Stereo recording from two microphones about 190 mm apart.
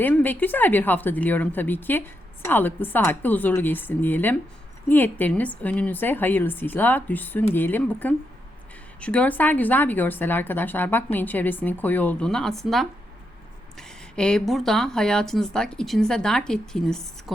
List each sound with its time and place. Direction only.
0.0 s speech: 10° left (ahead or behind)